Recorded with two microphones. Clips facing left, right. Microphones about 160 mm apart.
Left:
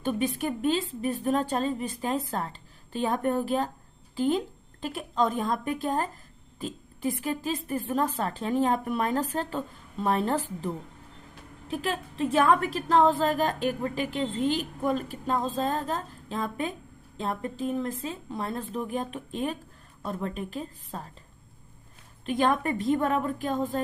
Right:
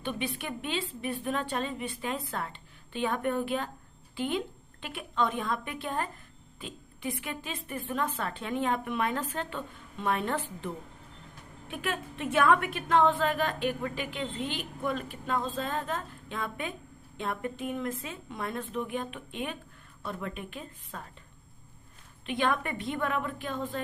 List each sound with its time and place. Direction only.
0.0 s a woman's voice: 40° left (ahead or behind)
11.7 s a woman's voice: 35° left (ahead or behind)
22.3 s a woman's voice: 40° left (ahead or behind)